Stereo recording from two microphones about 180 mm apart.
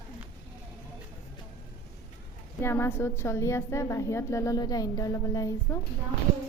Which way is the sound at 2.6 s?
15° left (ahead or behind).